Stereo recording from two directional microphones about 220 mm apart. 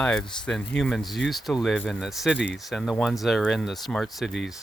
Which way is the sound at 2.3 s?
55° left (ahead or behind).